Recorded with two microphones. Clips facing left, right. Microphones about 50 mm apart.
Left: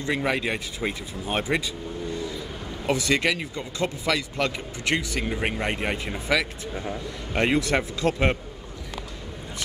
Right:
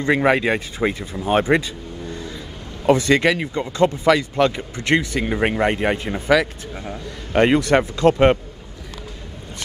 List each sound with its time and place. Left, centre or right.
0.0 s speech: right
0.8 s speech: right
1.4 s speech: right
2.9 s speech: right
5.3 s speech: right
7.6 s speech: right